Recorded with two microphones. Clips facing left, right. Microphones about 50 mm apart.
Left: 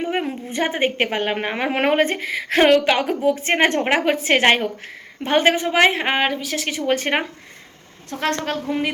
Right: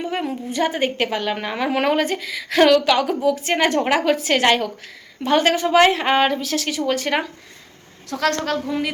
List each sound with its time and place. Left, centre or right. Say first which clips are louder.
0.0 s a woman's voice: left 1 dB; left; by 6.6 s centre
6.6 s a woman's voice: left 1 dB; left